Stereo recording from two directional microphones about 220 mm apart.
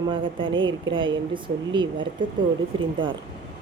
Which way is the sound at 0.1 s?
20° right (ahead or behind).